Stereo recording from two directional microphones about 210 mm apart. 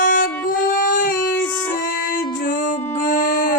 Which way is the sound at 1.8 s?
40° left (ahead or behind).